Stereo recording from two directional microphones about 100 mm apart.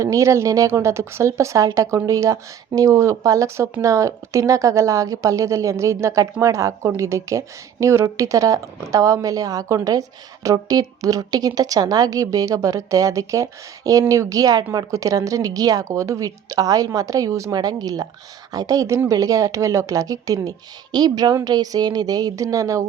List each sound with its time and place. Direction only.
0.0 s a woman's voice: 30° right (ahead or behind)